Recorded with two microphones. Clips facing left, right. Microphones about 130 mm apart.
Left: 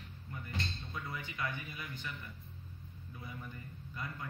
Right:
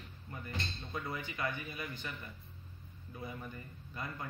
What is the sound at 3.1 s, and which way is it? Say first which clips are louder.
Speech: right 4 dB; 55° right (ahead or behind).